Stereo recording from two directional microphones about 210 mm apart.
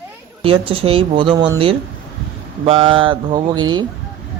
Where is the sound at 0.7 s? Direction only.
25° right (ahead or behind).